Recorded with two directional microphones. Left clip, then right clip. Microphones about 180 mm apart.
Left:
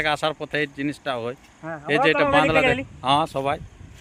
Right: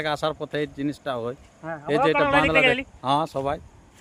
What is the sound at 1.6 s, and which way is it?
Speech, 40° left (ahead or behind).